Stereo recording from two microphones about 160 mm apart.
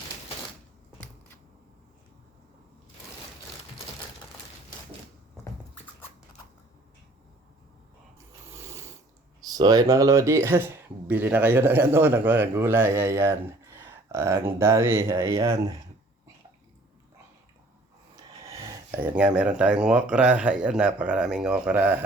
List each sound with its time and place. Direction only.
8.4 s a sound: 15° right (ahead or behind)
9.4 s speech: 25° right (ahead or behind)
18.6 s speech: 10° right (ahead or behind)